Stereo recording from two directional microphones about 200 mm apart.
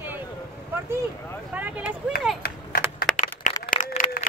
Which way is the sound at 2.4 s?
50° left (ahead or behind).